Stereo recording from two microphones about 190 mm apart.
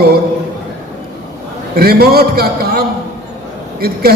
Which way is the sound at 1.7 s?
55° right (ahead or behind).